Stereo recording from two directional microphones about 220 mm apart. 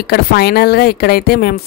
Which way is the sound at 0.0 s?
45° left (ahead or behind).